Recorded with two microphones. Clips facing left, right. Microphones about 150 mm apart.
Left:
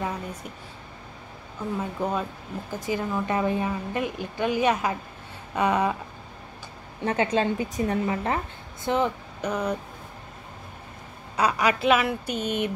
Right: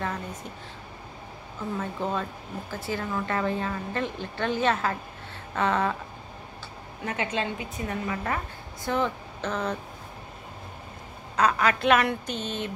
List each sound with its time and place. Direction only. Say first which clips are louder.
0.0 s speech: left 1 dB; 10° left (ahead or behind)
1.8 s speech: left 2 dB; 15° left (ahead or behind)
7.1 s a woman's voice: left 6 dB; 35° left (ahead or behind)
8.8 s speech: left 3 dB; 20° left (ahead or behind)
11.3 s speech: even; 10° left (ahead or behind)